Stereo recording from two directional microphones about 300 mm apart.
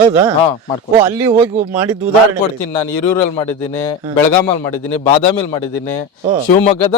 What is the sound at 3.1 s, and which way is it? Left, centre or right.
Speech, centre.